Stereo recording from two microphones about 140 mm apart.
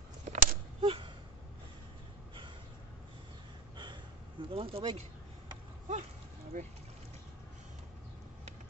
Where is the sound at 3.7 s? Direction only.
35° right (ahead or behind).